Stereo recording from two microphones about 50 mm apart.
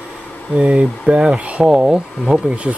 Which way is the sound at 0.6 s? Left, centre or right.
Right.